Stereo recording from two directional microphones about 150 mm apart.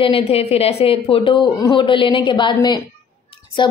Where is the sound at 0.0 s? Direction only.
40° left (ahead or behind).